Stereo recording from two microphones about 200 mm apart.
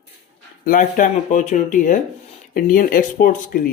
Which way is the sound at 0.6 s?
40° left (ahead or behind).